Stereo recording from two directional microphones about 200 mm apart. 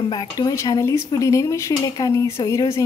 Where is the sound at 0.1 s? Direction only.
20° left (ahead or behind).